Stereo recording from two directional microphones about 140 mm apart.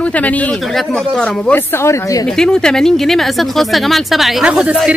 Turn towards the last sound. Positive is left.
turn(degrees=-5)  # may be behind; listen again after turning